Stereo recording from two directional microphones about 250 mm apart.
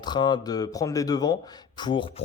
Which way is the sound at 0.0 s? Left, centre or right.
Centre.